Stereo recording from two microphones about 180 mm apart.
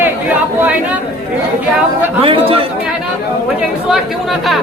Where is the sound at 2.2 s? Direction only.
30° right (ahead or behind).